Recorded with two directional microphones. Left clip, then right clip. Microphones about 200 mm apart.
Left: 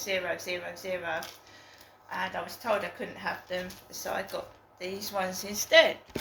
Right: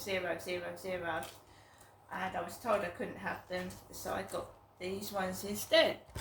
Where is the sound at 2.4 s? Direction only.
15° right (ahead or behind).